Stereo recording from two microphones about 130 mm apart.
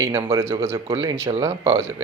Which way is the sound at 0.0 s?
20° right (ahead or behind).